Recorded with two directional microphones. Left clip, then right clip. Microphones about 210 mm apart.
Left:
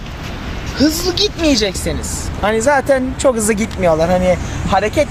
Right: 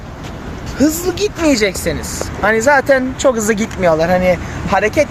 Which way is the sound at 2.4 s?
5° right (ahead or behind).